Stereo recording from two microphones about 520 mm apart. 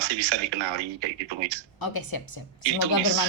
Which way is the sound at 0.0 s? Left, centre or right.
Right.